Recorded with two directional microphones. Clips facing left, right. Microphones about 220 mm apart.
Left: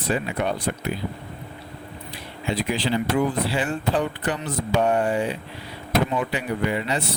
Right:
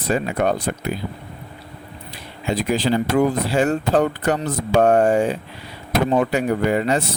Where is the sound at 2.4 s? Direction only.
45° right (ahead or behind).